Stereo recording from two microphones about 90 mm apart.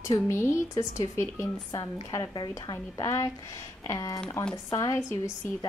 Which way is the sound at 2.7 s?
40° left (ahead or behind).